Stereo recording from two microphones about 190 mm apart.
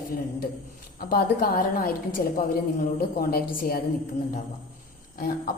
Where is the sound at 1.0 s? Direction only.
50° left (ahead or behind).